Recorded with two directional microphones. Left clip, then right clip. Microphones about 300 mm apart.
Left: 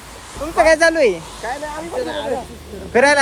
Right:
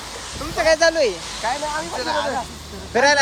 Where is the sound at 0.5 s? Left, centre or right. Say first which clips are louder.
Left 4 dB; centre.